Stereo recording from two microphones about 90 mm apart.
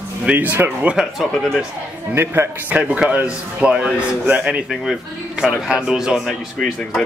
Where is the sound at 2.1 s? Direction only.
25° right (ahead or behind).